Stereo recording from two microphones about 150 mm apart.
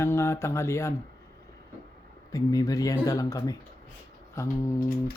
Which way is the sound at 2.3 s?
25° left (ahead or behind).